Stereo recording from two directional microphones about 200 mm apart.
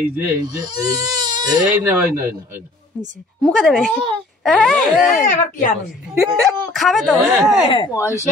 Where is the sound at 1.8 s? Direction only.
10° right (ahead or behind).